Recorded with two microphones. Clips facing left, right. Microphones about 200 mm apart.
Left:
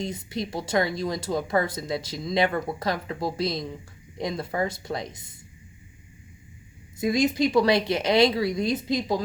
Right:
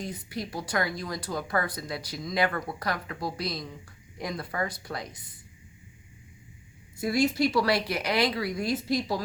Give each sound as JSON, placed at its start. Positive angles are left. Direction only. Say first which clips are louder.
{"t": 0.0, "sound": "speech", "louder": "left 4 dB", "side_deg": 25}
{"t": 7.0, "sound": "speech", "louder": "left 2 dB", "side_deg": 20}